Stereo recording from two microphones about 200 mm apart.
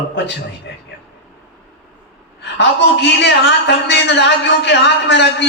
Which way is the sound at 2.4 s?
60° left (ahead or behind).